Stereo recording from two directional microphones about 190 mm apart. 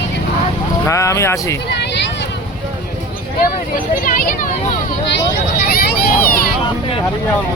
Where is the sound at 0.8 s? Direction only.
15° left (ahead or behind).